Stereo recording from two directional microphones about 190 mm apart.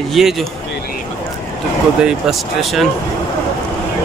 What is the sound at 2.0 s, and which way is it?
Speech, centre (ahead or behind).